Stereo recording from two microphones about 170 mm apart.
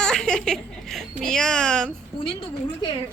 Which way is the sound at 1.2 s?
5° left (ahead or behind).